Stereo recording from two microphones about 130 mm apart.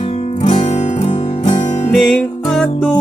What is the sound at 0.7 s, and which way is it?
Music, 60° left (ahead or behind).